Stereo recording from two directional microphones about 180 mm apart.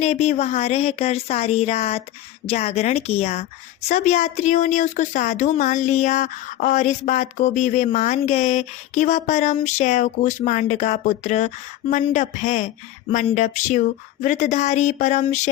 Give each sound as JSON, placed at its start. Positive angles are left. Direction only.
{"t": 0.0, "sound": "speech", "side_deg": 40}